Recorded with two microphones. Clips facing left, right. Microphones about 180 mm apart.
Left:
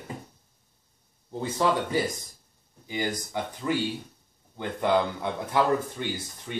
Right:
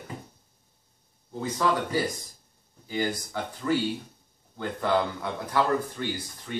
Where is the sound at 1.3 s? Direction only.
25° left (ahead or behind).